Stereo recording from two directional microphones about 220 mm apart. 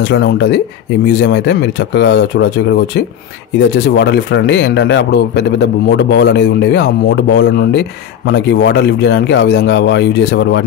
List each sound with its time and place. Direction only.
0.1 s a man's voice: 50° left (ahead or behind)